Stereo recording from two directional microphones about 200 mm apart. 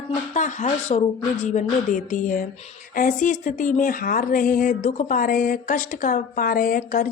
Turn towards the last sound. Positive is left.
turn(degrees=45)  # may be behind; listen again after turning